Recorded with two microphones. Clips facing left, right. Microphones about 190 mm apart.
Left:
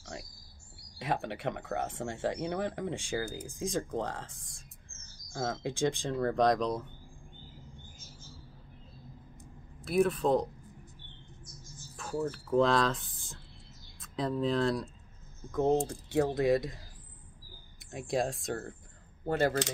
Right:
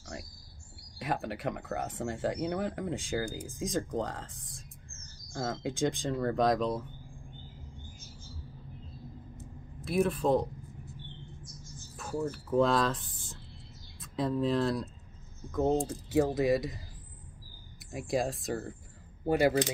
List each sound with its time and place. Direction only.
0.0 s bird: centre (ahead or behind)
0.9 s speech: centre (ahead or behind)
9.8 s speech: centre (ahead or behind)
12.0 s speech: centre (ahead or behind)
17.9 s speech: centre (ahead or behind)